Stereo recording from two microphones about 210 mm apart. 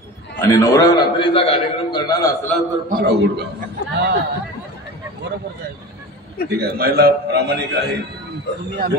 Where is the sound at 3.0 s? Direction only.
55° right (ahead or behind).